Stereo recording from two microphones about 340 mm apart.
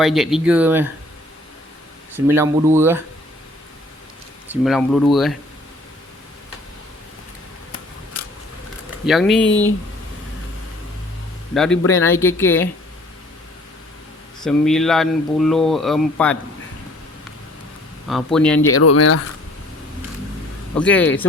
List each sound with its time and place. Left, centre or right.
0.0 s speech: centre
2.1 s speech: centre
4.6 s speech: centre
9.0 s speech: centre
11.5 s a woman's voice: centre
14.4 s speech: centre
18.1 s speech: centre
18.7 s speech: left
20.7 s speech: centre